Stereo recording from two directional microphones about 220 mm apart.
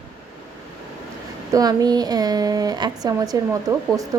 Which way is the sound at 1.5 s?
15° right (ahead or behind).